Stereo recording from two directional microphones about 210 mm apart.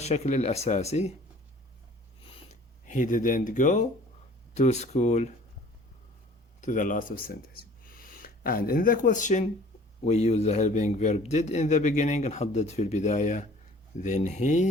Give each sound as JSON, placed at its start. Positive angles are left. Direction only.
{"t": 0.0, "sound": "a man's voice", "side_deg": 30}
{"t": 2.8, "sound": "a man's voice", "side_deg": 35}
{"t": 6.6, "sound": "a man's voice", "side_deg": 40}